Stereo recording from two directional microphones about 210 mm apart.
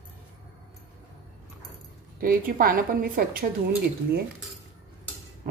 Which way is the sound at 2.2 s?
45° right (ahead or behind).